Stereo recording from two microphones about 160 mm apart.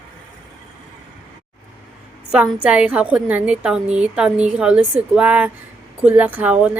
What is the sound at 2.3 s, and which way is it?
A woman's voice, 5° right (ahead or behind).